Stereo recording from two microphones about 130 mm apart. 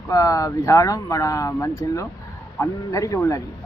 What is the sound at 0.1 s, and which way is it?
Speech, 25° left (ahead or behind).